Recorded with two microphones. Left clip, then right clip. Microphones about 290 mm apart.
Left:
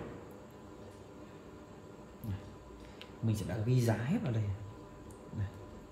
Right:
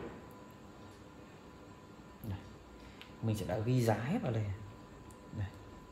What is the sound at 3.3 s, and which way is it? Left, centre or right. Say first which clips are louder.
Speech: right 2 dB; right.